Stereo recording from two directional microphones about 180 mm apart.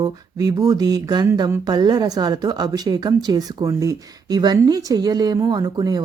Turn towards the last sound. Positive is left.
turn(degrees=-20)  # may be behind; listen again after turning